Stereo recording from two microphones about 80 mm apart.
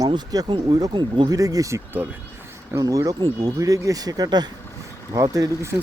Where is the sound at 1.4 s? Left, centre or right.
Right.